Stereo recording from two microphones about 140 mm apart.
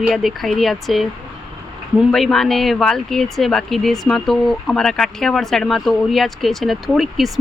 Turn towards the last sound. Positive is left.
turn(degrees=0)  # may be behind; listen again after turning